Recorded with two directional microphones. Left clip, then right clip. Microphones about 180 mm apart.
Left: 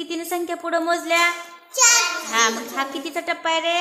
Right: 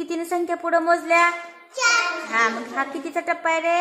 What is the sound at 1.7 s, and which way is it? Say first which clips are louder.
Music: left 2 dB; 55° left (ahead or behind).